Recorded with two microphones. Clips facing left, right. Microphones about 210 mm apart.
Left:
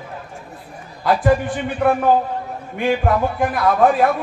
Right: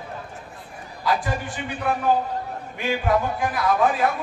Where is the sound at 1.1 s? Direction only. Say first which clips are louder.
Left 8 dB; 55° left (ahead or behind).